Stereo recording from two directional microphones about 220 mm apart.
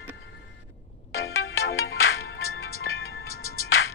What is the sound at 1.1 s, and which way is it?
Music, 65° left (ahead or behind).